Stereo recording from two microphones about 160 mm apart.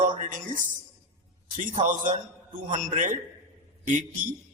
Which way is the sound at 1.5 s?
55° right (ahead or behind).